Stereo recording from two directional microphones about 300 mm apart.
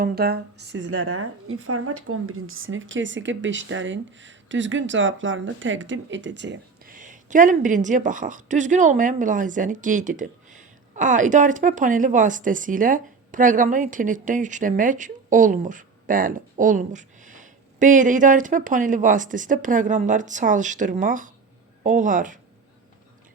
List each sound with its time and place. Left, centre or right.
0.0 s a woman's voice: right